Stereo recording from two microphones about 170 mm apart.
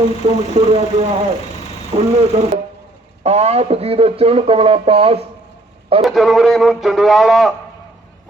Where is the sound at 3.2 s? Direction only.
40° right (ahead or behind).